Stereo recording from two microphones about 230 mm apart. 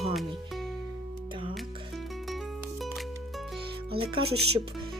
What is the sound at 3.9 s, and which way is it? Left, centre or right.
Speech, right.